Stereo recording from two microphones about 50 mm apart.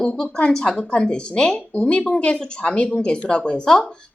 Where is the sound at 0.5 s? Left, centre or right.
Centre.